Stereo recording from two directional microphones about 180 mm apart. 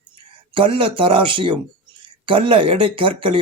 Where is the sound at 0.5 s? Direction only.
30° right (ahead or behind).